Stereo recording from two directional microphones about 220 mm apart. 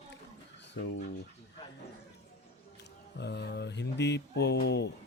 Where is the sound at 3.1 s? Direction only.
50° left (ahead or behind).